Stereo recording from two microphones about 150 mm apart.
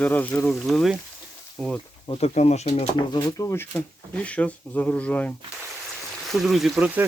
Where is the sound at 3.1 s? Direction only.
25° left (ahead or behind).